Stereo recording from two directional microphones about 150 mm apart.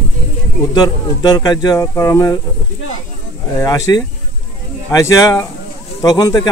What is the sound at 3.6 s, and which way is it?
Speech, 25° left (ahead or behind).